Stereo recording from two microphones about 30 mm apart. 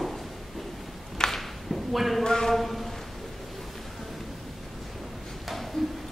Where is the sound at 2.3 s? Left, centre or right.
Centre.